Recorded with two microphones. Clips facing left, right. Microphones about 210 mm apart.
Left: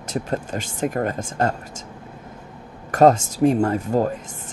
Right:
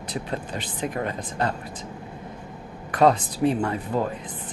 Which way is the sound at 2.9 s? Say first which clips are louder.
Left 4 dB; 45° left (ahead or behind).